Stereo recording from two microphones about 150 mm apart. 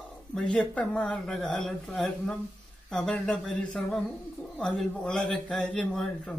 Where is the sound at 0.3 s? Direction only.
5° left (ahead or behind).